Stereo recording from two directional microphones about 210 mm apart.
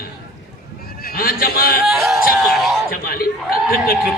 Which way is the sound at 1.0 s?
45° left (ahead or behind).